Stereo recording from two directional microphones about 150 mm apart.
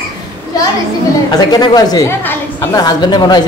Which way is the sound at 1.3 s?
25° left (ahead or behind).